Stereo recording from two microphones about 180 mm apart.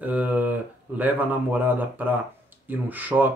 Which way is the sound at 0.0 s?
10° right (ahead or behind).